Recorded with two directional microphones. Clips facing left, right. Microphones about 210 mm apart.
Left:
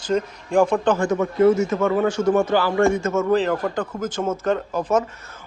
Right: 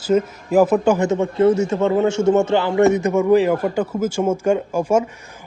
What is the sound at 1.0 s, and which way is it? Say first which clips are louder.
A man's voice: right 1 dB; 25° right (ahead or behind).